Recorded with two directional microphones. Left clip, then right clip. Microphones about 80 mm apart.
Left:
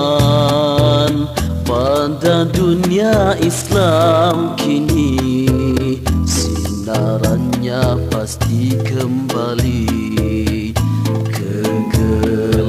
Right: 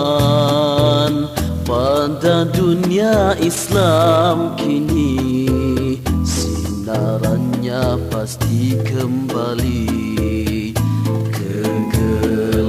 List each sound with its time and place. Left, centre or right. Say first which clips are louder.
0.0 s music: left 1 dB; right
11.6 s music: left 2 dB; right